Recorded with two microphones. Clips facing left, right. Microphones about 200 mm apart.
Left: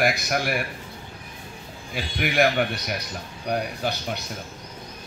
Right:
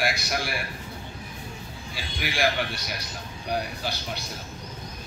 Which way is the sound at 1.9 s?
55° left (ahead or behind).